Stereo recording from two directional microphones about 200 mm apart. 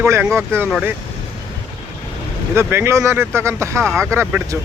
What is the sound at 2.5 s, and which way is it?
Speech, 10° right (ahead or behind).